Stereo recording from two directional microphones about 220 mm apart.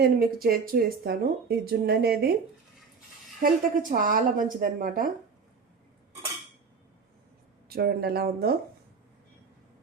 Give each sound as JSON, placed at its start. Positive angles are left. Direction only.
{"t": 0.0, "sound": "speech", "side_deg": -45}
{"t": 3.4, "sound": "speech", "side_deg": -40}
{"t": 7.7, "sound": "speech", "side_deg": -45}